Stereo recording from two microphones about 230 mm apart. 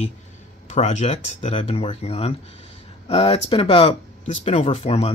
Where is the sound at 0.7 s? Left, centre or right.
Left.